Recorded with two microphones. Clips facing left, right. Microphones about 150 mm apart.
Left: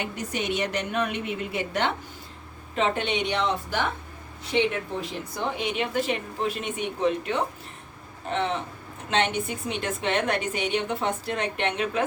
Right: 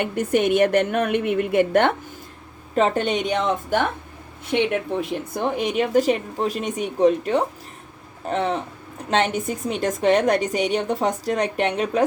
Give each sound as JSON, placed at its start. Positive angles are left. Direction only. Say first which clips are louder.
{"t": 0.0, "sound": "a woman's voice", "louder": "right 10 dB", "side_deg": -55}
{"t": 2.7, "sound": "a woman's voice", "louder": "right 5 dB", "side_deg": -45}